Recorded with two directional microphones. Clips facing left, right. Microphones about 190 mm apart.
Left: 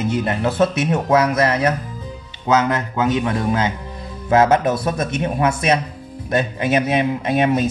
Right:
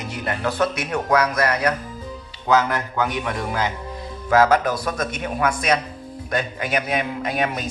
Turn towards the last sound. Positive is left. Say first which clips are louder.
# left 7 dB
turn(degrees=25)  # may be behind; listen again after turning